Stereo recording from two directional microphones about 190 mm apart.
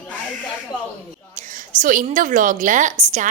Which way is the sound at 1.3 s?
45° right (ahead or behind).